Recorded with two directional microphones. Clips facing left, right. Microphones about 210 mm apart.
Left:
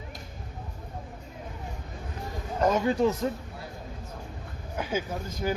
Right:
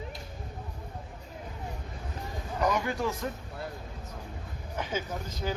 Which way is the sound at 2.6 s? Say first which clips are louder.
Left 5 dB; 25° left (ahead or behind).